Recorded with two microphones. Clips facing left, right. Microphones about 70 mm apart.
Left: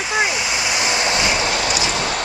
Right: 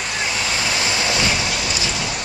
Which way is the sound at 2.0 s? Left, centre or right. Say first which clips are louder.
Left 4 dB; left.